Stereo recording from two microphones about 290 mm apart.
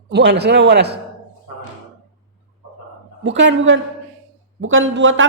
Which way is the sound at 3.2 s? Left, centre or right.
Right.